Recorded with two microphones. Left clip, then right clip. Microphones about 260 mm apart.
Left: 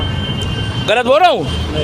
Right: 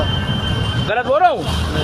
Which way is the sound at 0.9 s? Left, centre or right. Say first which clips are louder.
Left 4 dB; left.